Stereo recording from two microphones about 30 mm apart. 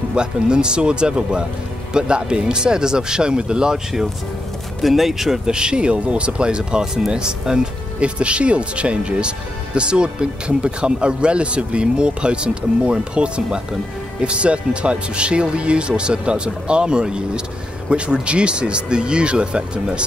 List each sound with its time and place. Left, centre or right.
0.1 s speech: right
4.8 s speech: centre
5.5 s speech: right
8.0 s speech: right